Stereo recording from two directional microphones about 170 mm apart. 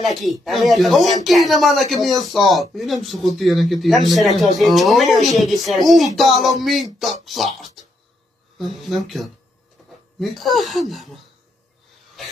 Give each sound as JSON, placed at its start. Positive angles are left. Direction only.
{"t": 0.0, "sound": "speech", "side_deg": 0}
{"t": 7.8, "sound": "cough", "side_deg": 0}
{"t": 8.5, "sound": "speech", "side_deg": 0}
{"t": 9.8, "sound": "a sound", "side_deg": 0}
{"t": 10.1, "sound": "speech", "side_deg": 0}
{"t": 12.2, "sound": "a sound", "side_deg": 0}